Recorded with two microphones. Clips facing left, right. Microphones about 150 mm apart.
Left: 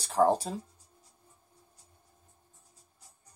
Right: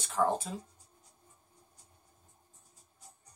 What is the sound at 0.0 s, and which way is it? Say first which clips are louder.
Speech: left 5 dB; 35° left (ahead or behind).